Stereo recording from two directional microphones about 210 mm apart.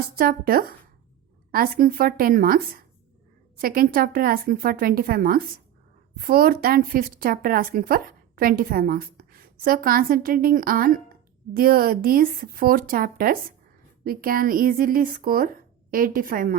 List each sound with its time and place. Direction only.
0.2 s a woman's voice: 45° right (ahead or behind)